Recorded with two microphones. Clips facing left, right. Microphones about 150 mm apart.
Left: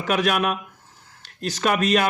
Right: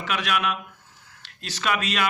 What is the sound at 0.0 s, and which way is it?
Speech, 45° left (ahead or behind).